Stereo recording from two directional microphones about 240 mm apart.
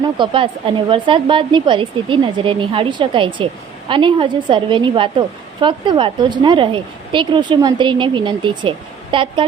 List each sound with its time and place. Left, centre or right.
0.2 s a woman's voice: centre